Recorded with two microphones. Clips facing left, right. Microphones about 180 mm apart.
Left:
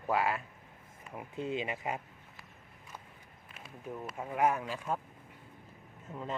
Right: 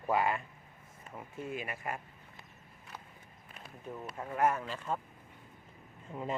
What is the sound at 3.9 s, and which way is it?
Speech, 5° left (ahead or behind).